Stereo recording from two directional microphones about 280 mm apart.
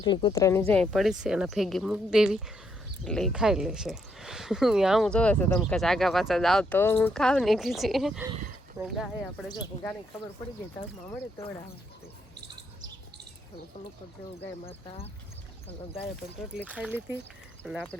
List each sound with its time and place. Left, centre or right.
0.0 s speech: centre
9.5 s speech: centre
11.0 s speech: centre
14.6 s speech: left
16.6 s speech: centre